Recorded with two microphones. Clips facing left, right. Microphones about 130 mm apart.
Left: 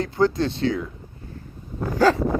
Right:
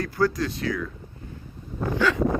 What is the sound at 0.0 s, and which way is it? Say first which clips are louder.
Speech: left 3 dB; 25° left (ahead or behind).